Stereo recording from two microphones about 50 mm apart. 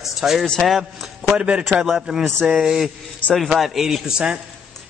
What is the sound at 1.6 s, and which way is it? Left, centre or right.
A man's voice, centre.